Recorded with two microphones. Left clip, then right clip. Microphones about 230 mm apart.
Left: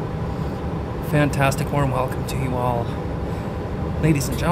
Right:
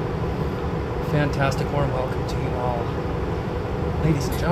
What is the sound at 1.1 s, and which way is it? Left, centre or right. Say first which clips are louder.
Speech: left 4 dB; left.